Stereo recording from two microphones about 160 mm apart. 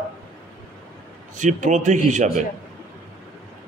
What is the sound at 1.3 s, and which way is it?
A man's voice, 50° right (ahead or behind).